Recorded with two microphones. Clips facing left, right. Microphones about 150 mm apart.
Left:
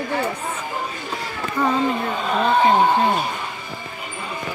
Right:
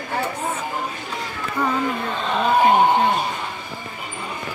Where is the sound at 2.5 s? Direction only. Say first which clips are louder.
Right 1 dB; 10° right (ahead or behind).